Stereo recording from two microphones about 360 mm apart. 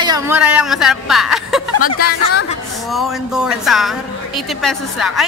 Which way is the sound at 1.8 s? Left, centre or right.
Left.